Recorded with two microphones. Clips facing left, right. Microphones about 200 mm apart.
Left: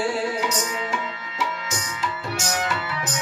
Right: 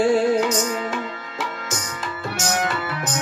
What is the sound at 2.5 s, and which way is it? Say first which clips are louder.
Music: right 3 dB; 50° right (ahead or behind).